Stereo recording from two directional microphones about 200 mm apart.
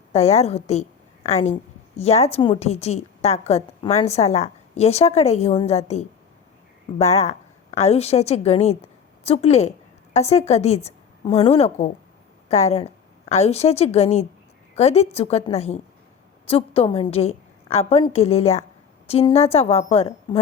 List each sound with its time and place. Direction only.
0.1 s a woman's voice: 35° left (ahead or behind)